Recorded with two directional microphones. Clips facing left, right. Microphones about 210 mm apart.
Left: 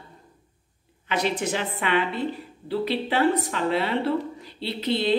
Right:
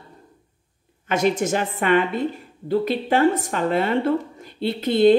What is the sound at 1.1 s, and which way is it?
A woman's voice, 45° right (ahead or behind).